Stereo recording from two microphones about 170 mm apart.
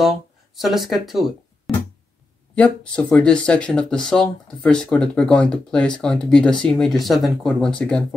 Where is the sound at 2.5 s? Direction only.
10° left (ahead or behind).